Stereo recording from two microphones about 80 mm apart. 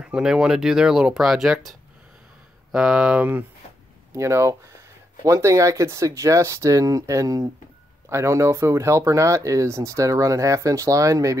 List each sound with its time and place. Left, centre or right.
0.0 s speech: centre
4.1 s speech: right